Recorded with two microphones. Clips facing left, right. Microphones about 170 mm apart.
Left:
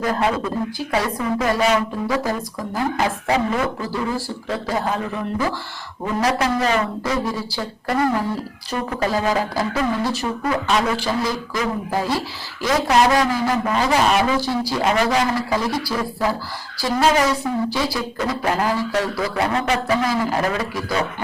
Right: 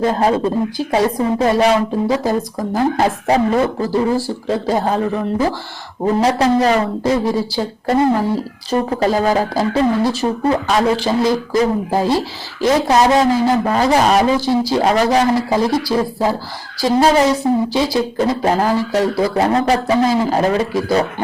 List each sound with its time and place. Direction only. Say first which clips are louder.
0.0 s a woman's voice: right 6 dB; 30° right (ahead or behind)
2.6 s a woman's voice: right 5 dB; 35° right (ahead or behind)
10.7 s speech: right 4 dB; 45° right (ahead or behind)
11.0 s a woman's voice: right 7 dB; 25° right (ahead or behind)
19.9 s speech: right 5 dB; 25° right (ahead or behind)